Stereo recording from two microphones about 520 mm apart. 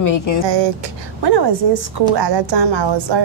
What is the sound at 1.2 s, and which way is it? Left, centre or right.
A woman's voice, right.